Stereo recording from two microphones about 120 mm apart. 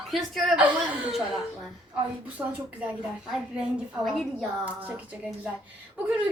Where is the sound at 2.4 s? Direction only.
10° right (ahead or behind).